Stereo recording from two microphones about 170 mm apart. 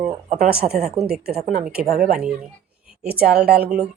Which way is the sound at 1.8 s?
60° right (ahead or behind).